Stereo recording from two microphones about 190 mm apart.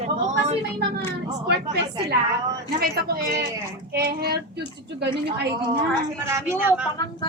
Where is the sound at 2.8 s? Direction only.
60° right (ahead or behind).